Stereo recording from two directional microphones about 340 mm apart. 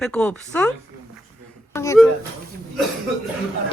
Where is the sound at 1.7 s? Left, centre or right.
Centre.